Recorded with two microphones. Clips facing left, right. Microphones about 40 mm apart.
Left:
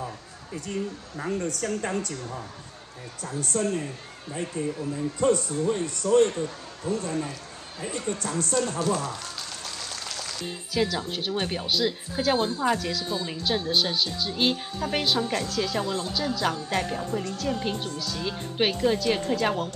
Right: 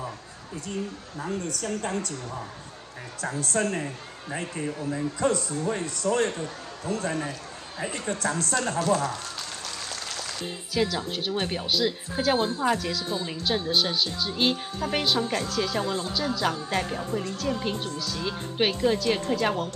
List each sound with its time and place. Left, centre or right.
1.2 s a woman's voice: left
3.2 s a man's voice: right
10.7 s a woman's voice: centre
15.8 s speech: right
16.1 s a woman's voice: centre